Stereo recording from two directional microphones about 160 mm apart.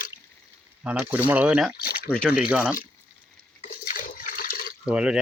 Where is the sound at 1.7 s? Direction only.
70° left (ahead or behind).